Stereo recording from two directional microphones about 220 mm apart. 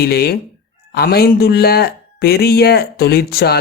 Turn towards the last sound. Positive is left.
turn(degrees=45)  # may be behind; listen again after turning